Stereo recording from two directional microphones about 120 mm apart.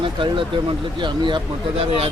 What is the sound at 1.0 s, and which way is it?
Speech, 40° right (ahead or behind).